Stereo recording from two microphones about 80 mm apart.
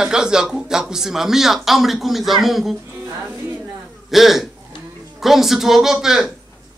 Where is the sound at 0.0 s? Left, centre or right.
Centre.